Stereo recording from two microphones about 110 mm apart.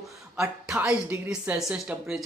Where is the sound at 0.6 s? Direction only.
10° right (ahead or behind).